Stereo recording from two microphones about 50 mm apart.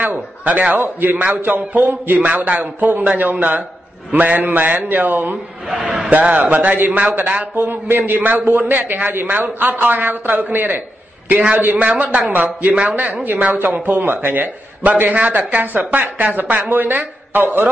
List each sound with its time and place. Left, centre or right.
0.0 s a man's voice: right